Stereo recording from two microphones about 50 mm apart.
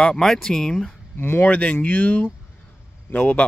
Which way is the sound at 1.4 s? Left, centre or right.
Left.